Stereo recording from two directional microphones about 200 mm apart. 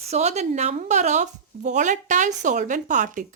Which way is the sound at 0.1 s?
35° right (ahead or behind).